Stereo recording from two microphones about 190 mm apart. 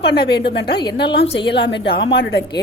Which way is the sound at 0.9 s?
65° left (ahead or behind).